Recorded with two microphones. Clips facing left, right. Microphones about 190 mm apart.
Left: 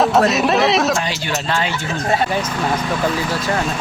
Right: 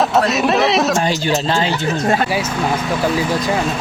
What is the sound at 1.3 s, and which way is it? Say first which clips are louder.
Speech: right 1 dB; 30° right (ahead or behind).